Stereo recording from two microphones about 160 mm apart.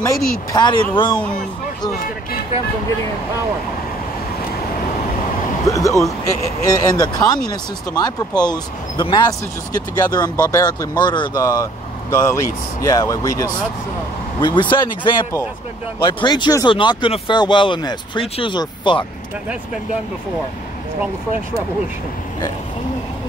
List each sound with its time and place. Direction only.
0.5 s speech: 25° left (ahead or behind)
5.7 s speech: 20° left (ahead or behind)